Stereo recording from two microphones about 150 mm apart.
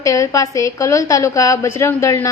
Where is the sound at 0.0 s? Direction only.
20° left (ahead or behind).